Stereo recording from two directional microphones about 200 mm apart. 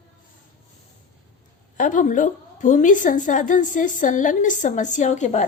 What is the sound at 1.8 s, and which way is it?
A woman's voice, 40° left (ahead or behind).